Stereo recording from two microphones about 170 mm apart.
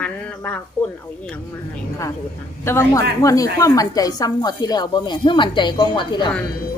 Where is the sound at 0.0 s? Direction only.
10° left (ahead or behind).